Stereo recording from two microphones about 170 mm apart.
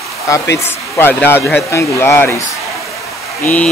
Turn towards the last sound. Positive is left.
turn(degrees=10)  # may be behind; listen again after turning